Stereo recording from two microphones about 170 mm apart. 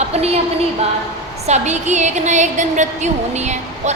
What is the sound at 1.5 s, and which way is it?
A woman's voice, 40° right (ahead or behind).